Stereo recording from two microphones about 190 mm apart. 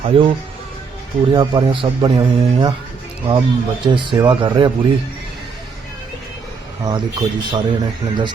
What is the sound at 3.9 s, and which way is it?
Speech, 25° right (ahead or behind).